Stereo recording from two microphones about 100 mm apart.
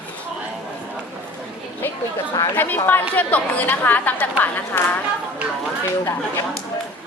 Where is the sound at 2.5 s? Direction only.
20° left (ahead or behind).